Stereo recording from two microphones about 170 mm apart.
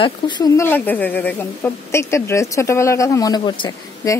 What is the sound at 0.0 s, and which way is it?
Speech, 25° left (ahead or behind).